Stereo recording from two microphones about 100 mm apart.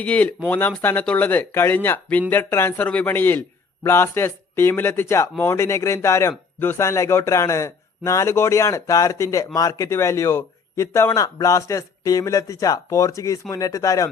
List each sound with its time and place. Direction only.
0.0 s a man's voice: 15° left (ahead or behind); by 14.1 s 35° left (ahead or behind)